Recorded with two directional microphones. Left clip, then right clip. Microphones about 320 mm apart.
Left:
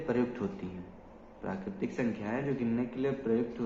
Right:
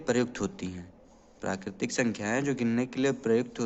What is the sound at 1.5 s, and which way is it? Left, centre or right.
Speech, right.